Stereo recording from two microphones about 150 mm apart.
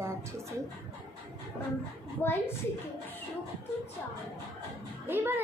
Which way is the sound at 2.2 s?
15° left (ahead or behind).